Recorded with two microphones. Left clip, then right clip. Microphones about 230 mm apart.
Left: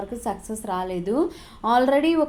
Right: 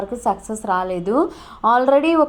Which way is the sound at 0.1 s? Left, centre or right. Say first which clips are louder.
Right 8 dB; right.